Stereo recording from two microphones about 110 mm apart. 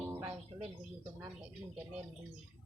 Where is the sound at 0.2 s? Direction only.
55° right (ahead or behind).